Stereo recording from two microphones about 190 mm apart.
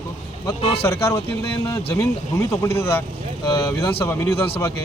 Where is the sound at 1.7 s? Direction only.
15° left (ahead or behind).